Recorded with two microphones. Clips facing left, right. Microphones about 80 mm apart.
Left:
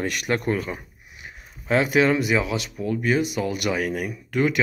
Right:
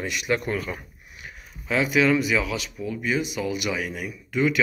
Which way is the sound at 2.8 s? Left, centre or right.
Left.